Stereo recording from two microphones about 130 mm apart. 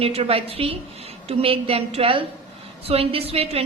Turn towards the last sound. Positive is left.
turn(degrees=-50)  # may be behind; listen again after turning